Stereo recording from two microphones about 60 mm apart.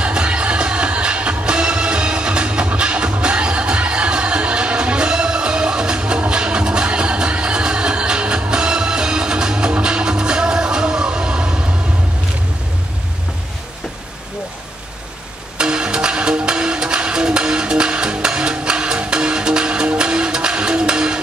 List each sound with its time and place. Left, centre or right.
0.0 s music: centre
15.5 s music: centre